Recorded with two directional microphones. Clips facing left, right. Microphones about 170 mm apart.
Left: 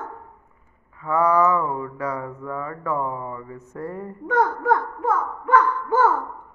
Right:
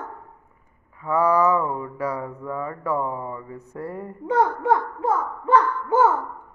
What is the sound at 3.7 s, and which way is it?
Mantra, 10° right (ahead or behind).